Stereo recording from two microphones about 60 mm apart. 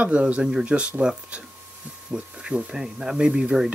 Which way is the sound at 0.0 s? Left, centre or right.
Right.